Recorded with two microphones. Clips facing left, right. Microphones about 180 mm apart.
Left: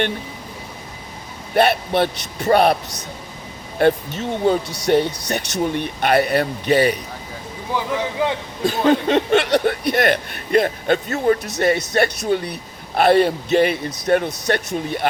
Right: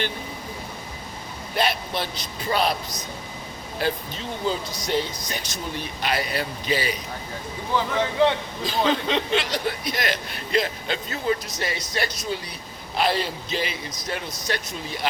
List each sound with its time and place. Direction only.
1.5 s speech: 60° left (ahead or behind)
3.8 s speech: 60° left (ahead or behind)
7.7 s speech: 10° left (ahead or behind)
8.6 s speech: 55° left (ahead or behind)